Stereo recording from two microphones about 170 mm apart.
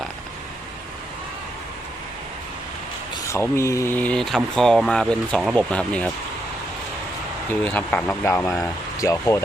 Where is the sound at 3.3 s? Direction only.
15° left (ahead or behind).